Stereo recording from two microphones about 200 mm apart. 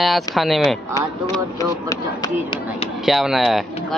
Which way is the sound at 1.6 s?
15° left (ahead or behind).